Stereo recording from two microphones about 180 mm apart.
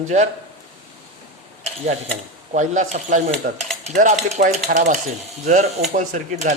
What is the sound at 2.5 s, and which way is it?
A man's voice, 40° right (ahead or behind).